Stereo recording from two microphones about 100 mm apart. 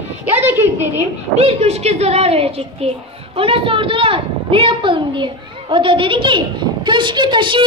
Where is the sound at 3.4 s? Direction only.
65° right (ahead or behind).